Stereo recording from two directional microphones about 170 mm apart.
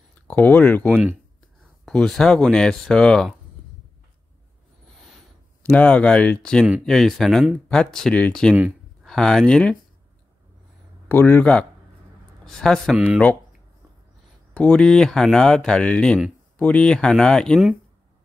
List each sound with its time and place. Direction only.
0.3 s speech: 10° left (ahead or behind)
5.6 s speech: 10° left (ahead or behind)
11.1 s speech: 10° left (ahead or behind)
12.9 s speech: 10° right (ahead or behind)
14.5 s speech: 5° left (ahead or behind)